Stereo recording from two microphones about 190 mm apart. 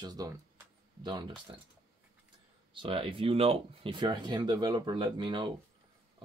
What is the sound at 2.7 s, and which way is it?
Speech, 25° right (ahead or behind).